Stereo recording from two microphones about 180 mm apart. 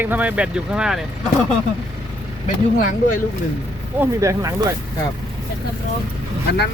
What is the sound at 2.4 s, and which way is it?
Speech, 45° left (ahead or behind).